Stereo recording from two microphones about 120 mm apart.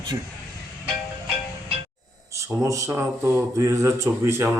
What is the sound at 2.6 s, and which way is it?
Speech, 25° right (ahead or behind).